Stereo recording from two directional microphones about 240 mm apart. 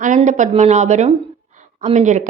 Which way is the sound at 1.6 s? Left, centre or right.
Right.